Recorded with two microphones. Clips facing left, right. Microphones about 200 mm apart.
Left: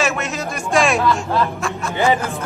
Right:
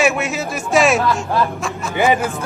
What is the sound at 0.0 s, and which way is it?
A man's voice, 5° right (ahead or behind).